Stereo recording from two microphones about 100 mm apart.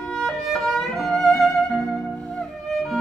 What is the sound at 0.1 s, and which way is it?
Violin, centre (ahead or behind).